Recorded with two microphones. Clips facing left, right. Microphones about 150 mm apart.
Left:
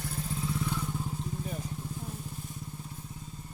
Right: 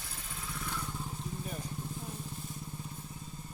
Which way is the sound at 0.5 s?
15° left (ahead or behind).